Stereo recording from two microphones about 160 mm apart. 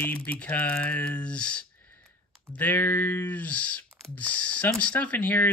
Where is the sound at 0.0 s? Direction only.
10° left (ahead or behind).